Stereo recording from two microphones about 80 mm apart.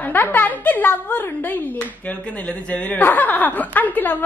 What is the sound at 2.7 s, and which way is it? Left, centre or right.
A woman's voice, centre.